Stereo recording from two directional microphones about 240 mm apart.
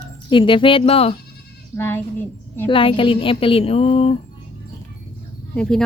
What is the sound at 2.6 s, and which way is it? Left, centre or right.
A woman's voice, left.